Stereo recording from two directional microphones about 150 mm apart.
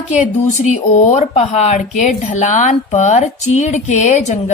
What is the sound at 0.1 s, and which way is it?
A woman's voice, 50° left (ahead or behind).